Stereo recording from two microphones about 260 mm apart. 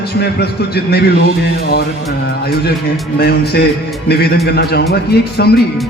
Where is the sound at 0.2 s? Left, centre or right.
Left.